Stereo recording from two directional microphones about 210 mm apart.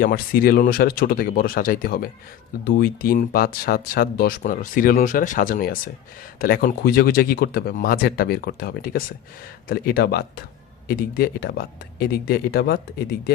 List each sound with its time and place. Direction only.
0.0 s speech: 45° left (ahead or behind)